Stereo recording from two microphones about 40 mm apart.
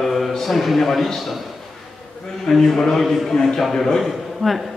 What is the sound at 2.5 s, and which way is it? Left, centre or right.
A man's voice, centre.